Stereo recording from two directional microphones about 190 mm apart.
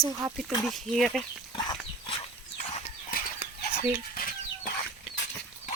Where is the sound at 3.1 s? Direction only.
45° left (ahead or behind).